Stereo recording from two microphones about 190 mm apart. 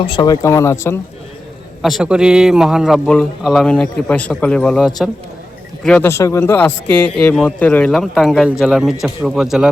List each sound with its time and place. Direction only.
0.0 s speech: 25° left (ahead or behind)
0.4 s speech: 15° left (ahead or behind)
1.8 s a man's voice: centre (ahead or behind)